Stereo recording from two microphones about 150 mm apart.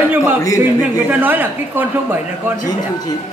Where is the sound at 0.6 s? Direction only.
10° right (ahead or behind).